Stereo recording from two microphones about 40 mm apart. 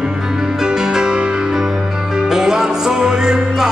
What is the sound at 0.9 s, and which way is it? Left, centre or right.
Music, right.